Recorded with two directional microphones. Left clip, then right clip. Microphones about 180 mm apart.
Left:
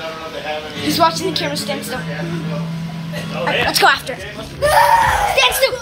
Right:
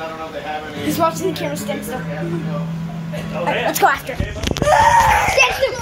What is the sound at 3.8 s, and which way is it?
Speech, 5° left (ahead or behind).